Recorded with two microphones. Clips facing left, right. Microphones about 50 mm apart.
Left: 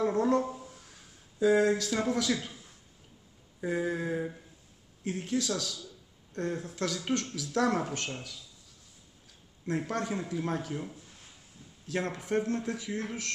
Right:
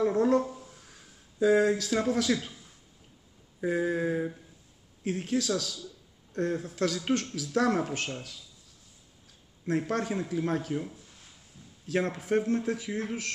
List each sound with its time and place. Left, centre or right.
0.1 s speech: centre
0.6 s a sound: centre
1.4 s speech: centre
3.6 s speech: centre
8.1 s speech: centre
9.7 s speech: centre
12.1 s speech: centre